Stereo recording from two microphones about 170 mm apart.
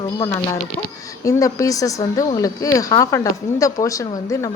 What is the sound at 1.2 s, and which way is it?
Speech, 20° left (ahead or behind).